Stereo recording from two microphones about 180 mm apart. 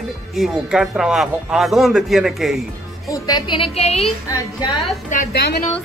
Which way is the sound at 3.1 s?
20° left (ahead or behind).